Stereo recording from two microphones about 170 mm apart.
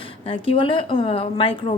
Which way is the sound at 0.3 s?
30° left (ahead or behind).